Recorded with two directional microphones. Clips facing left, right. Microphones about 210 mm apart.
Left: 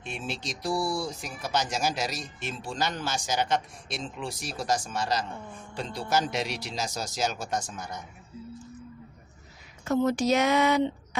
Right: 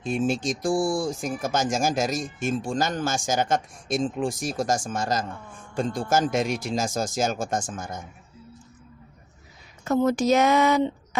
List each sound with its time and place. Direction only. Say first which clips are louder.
0.0 s speech: right 11 dB; 45° right (ahead or behind)
9.9 s speech: right 3 dB; 45° right (ahead or behind)